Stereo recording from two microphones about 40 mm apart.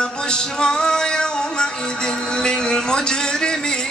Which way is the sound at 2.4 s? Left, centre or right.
Centre.